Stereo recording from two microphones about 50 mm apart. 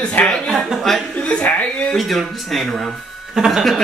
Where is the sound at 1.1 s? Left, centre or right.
Left.